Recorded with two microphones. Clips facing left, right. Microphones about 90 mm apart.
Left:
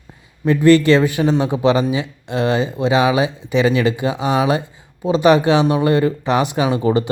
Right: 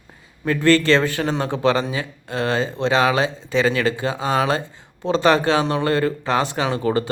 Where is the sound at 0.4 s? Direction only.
20° left (ahead or behind).